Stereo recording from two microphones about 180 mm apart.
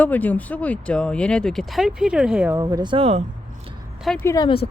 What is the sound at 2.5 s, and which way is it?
Speech, 20° right (ahead or behind).